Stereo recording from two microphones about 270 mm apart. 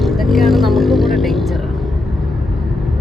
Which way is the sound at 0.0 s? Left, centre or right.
Centre.